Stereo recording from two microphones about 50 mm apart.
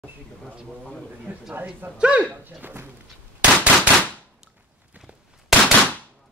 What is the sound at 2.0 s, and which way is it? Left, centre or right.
Speech, right.